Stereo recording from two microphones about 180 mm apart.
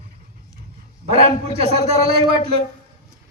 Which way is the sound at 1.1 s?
35° right (ahead or behind).